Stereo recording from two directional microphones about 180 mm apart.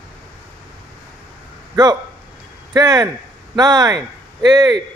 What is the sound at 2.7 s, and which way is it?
Speech, 20° right (ahead or behind).